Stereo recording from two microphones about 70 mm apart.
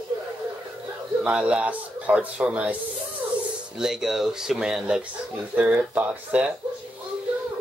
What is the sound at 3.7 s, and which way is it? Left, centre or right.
Speech, centre.